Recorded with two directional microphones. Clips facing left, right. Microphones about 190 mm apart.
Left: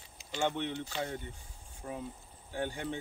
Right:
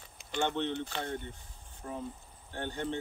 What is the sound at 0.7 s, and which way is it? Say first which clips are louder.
Speech: right 1 dB; 55° right (ahead or behind).